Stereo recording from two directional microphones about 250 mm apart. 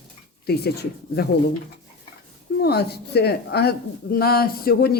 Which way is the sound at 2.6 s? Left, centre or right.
Left.